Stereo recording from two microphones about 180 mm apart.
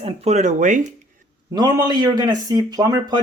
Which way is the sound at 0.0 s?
35° right (ahead or behind).